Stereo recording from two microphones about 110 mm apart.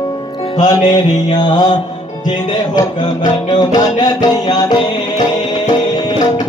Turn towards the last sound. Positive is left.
turn(degrees=40)  # may be behind; listen again after turning